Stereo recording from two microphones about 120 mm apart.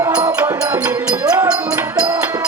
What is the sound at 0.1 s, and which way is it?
Music, 10° right (ahead or behind).